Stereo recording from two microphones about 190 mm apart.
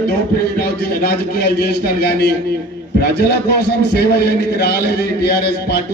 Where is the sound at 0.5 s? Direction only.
55° left (ahead or behind).